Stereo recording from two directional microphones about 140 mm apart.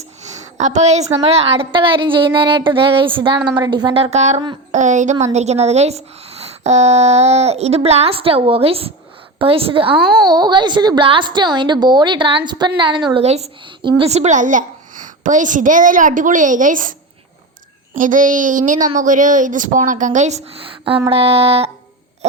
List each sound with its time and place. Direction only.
0.2 s a sound: 55° right (ahead or behind)
1.1 s a woman's voice: 45° right (ahead or behind)
13.2 s a child's voice: 50° right (ahead or behind); by 16.9 s 70° right (ahead or behind)
17.9 s a child's voice: 70° right (ahead or behind)
21.1 s speech: 45° right (ahead or behind)